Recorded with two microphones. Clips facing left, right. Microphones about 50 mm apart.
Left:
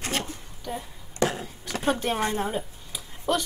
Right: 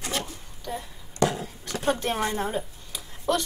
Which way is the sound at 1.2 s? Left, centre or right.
Left.